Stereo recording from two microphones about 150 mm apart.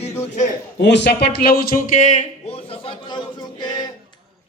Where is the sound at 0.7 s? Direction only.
90° left; by 3.6 s 30° left (ahead or behind).